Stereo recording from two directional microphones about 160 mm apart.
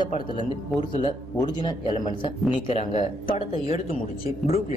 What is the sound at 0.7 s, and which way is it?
Speech, centre (ahead or behind).